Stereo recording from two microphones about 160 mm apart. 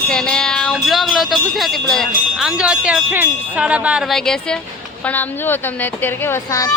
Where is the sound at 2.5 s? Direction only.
5° right (ahead or behind).